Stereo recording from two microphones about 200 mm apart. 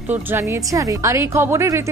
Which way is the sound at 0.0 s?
10° right (ahead or behind).